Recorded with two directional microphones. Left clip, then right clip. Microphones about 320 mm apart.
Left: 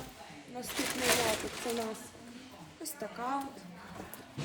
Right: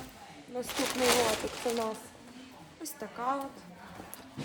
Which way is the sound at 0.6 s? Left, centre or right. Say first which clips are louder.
Right 4 dB; centre.